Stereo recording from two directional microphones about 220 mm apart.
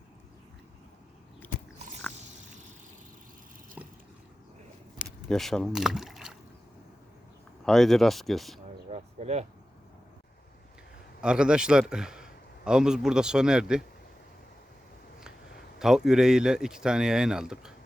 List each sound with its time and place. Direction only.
3.8 s boat: 5° right (ahead or behind)
5.3 s speech: centre (ahead or behind)
7.6 s speech: centre (ahead or behind)
8.9 s a sound: 30° right (ahead or behind)
11.2 s a man's voice: 5° right (ahead or behind)
15.8 s speech: centre (ahead or behind)